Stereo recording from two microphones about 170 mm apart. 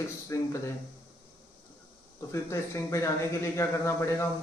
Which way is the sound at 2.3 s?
15° left (ahead or behind).